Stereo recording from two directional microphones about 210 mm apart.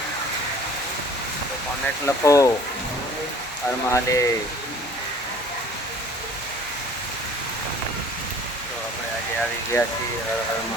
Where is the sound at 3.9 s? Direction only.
15° left (ahead or behind).